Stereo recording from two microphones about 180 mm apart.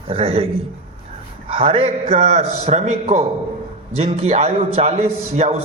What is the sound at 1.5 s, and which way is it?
A man's voice, 30° right (ahead or behind).